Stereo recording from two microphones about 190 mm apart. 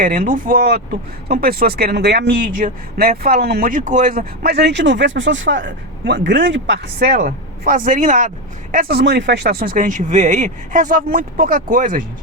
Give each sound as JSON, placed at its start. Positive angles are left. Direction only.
{"t": 0.0, "sound": "speech", "side_deg": -45}
{"t": 7.2, "sound": "speech", "side_deg": -45}